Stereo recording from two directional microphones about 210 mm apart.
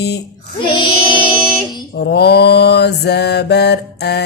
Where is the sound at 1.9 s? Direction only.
50° left (ahead or behind).